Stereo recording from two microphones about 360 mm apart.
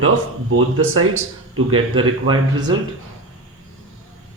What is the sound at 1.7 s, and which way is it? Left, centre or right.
Speech, centre.